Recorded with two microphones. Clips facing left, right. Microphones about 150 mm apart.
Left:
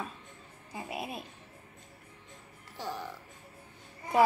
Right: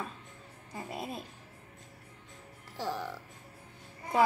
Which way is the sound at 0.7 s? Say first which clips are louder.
Left 1 dB; 5° left (ahead or behind).